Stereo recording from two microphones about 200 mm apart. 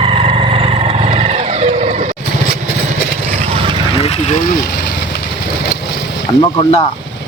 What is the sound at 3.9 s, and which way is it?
Vehicle, 30° left (ahead or behind).